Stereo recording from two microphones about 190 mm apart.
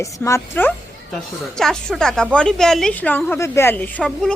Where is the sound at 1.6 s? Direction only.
Centre (ahead or behind).